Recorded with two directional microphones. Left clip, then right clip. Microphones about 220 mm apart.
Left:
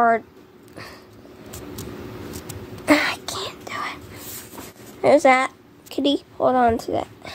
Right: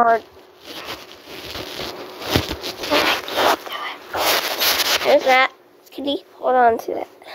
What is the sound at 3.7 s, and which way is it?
Whispering, 5° left (ahead or behind).